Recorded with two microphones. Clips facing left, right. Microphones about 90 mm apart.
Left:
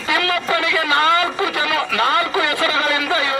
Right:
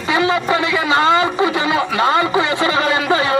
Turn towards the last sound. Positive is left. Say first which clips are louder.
# right 4 dB
turn(degrees=-25)  # may be behind; listen again after turning